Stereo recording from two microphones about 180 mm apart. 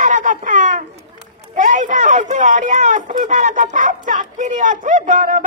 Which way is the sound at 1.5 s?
45° right (ahead or behind).